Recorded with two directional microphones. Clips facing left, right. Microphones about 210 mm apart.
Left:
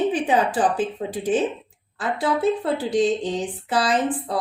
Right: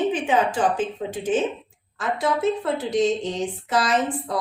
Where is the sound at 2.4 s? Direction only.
35° left (ahead or behind).